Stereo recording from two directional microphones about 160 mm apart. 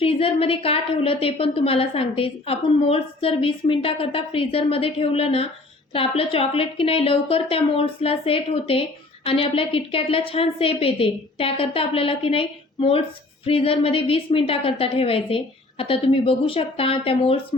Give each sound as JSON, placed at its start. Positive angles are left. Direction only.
{"t": 0.0, "sound": "a woman's voice", "side_deg": 35}